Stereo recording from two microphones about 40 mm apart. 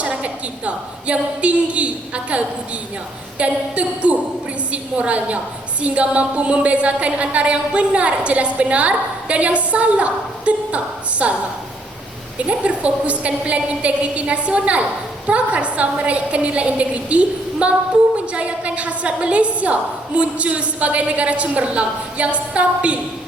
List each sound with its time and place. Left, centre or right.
0.0 s a woman's voice: right
12.4 s a woman's voice: right